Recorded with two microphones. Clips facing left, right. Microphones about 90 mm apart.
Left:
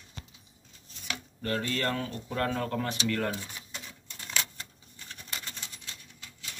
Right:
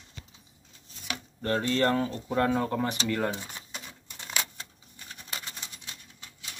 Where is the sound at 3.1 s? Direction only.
20° right (ahead or behind).